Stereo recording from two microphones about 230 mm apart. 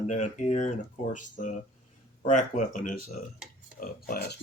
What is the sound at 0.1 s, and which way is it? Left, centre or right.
Speech, left.